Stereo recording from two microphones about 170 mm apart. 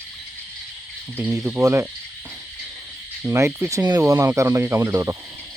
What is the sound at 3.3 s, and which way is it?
Speech, 15° right (ahead or behind).